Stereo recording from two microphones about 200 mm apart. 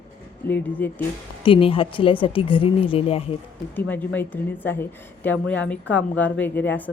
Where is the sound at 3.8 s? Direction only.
10° left (ahead or behind).